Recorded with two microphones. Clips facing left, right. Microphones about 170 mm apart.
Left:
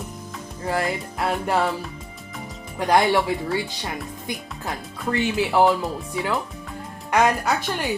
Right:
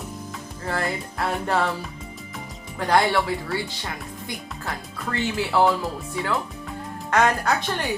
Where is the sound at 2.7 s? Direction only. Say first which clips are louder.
Left 2 dB; 15° left (ahead or behind).